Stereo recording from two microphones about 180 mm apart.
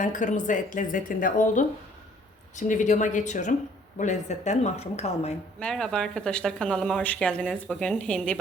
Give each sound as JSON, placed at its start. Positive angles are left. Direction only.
{"t": 0.0, "sound": "speech", "side_deg": 45}
{"t": 5.5, "sound": "speech", "side_deg": 5}